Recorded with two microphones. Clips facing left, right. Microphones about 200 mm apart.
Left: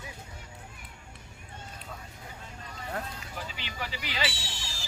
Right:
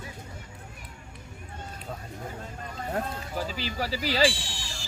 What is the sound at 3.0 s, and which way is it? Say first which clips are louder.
Speech: right 8 dB; 40° right (ahead or behind).